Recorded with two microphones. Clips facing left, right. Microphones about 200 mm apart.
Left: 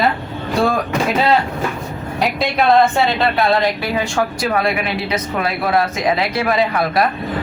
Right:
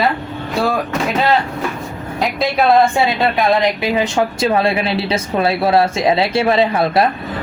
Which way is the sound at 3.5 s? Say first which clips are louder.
Right 2 dB; 20° right (ahead or behind).